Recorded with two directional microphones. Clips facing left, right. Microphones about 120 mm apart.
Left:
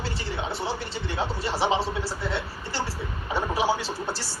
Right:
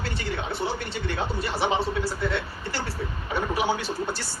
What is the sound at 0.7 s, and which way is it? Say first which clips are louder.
Speech: right 2 dB; 60° right (ahead or behind).